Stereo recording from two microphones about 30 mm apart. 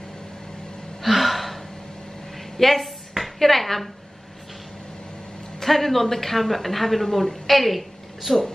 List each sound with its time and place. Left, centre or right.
1.0 s gasp: centre
2.3 s a sound: centre
3.3 s speech: centre
5.6 s speech: centre